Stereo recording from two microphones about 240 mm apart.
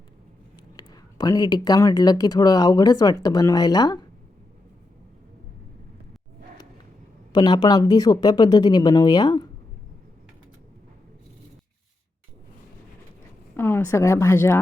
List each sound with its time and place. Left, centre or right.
0.8 s speech: centre
7.3 s speech: centre
13.6 s speech: centre